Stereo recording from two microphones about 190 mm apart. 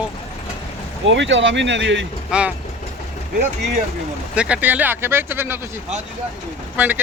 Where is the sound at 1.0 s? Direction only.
75° right (ahead or behind).